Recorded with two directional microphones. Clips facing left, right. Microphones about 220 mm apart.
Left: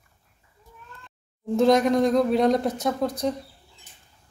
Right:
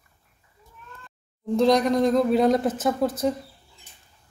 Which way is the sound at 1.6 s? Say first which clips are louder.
Left 1 dB; centre (ahead or behind).